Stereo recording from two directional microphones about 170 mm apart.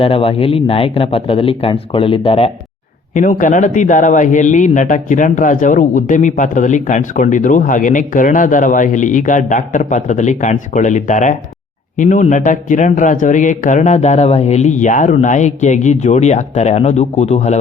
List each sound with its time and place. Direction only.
0.0 s speech: 35° left (ahead or behind)
3.2 s a man's voice: 50° left (ahead or behind)